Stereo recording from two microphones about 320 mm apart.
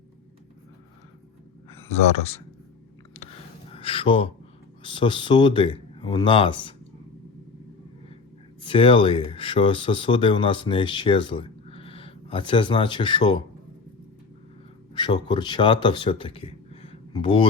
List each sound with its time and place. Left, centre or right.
1.9 s speech: centre
3.7 s speech: centre
8.6 s speech: centre
14.9 s speech: centre